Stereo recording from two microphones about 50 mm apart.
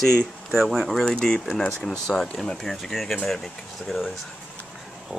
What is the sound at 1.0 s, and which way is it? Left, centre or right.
Speech, left.